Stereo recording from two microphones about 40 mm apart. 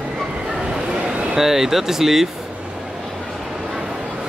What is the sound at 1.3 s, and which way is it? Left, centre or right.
Speech, centre.